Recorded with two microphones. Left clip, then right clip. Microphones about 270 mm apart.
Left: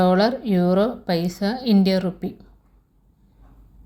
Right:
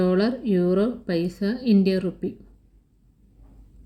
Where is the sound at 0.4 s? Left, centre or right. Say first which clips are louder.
Left 2 dB; centre.